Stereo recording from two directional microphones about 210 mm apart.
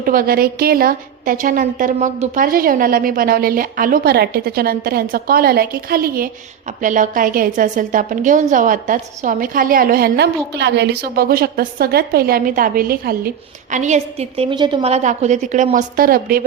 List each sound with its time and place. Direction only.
0.0 s a woman's voice: 45° right (ahead or behind)